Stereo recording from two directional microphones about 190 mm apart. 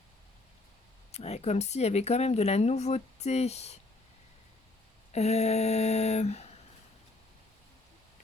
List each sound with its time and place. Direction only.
1.1 s speech: 35° left (ahead or behind)
5.1 s speech: 35° left (ahead or behind)